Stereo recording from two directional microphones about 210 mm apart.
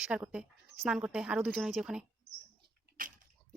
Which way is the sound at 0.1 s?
5° right (ahead or behind).